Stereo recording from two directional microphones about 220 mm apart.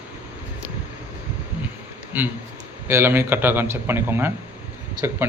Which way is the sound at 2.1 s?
5° right (ahead or behind).